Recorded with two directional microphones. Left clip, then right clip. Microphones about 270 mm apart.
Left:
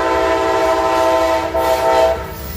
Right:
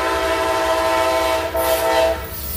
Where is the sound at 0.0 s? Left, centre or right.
Right.